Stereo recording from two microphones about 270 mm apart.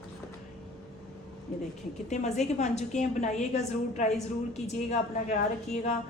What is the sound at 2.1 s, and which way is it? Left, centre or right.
A woman's voice, left.